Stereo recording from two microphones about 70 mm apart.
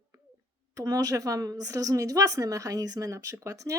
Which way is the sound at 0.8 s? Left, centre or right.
Right.